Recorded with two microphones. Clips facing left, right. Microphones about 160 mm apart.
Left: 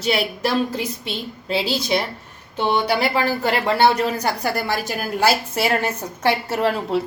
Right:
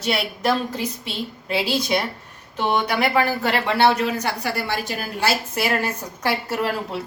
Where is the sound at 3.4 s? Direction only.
35° left (ahead or behind).